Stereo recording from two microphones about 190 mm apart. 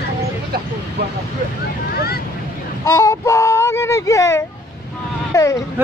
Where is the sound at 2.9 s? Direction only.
15° left (ahead or behind).